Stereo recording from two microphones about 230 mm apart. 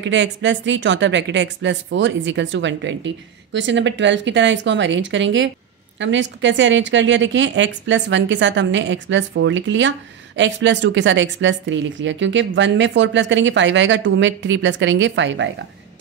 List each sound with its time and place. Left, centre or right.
0.0 s a woman's voice: right